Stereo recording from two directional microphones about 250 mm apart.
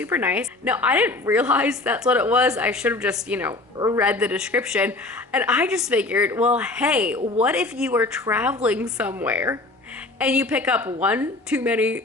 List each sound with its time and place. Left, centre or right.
0.0 s a woman's voice: centre